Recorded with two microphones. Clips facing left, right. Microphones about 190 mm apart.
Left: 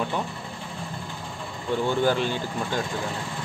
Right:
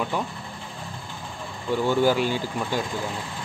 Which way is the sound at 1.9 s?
10° right (ahead or behind).